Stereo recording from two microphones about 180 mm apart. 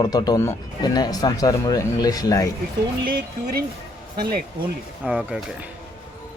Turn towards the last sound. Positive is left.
turn(degrees=-5)  # may be behind; listen again after turning